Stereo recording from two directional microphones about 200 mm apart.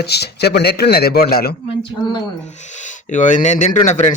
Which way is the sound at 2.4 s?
35° left (ahead or behind).